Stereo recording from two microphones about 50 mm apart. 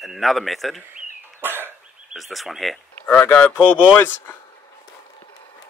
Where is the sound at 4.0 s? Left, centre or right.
Left.